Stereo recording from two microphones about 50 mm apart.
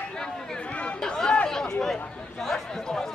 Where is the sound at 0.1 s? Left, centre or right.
Centre.